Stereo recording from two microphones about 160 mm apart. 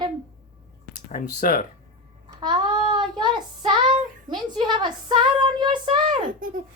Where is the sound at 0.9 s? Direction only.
55° left (ahead or behind).